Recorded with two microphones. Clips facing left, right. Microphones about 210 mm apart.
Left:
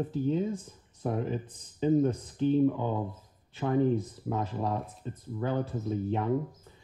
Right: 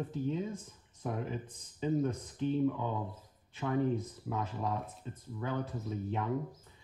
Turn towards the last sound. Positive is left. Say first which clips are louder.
# left 6 dB
turn(degrees=35)  # may be behind; listen again after turning